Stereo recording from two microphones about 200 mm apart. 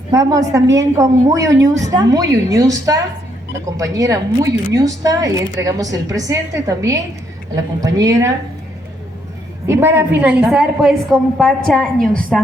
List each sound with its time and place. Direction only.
0.1 s a woman's voice: 15° right (ahead or behind)
9.6 s a woman's voice: 10° right (ahead or behind)